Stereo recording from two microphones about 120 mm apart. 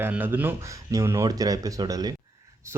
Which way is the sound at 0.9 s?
25° right (ahead or behind).